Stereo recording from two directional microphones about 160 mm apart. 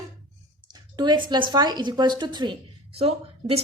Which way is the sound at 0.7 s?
25° right (ahead or behind).